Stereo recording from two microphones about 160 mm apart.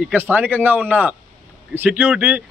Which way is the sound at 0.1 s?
10° right (ahead or behind).